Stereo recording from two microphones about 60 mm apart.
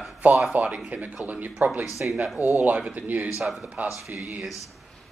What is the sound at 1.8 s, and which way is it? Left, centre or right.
Speech, centre.